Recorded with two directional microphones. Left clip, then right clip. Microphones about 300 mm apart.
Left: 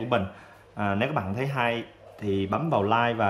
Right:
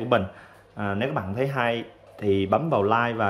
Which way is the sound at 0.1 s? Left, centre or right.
Centre.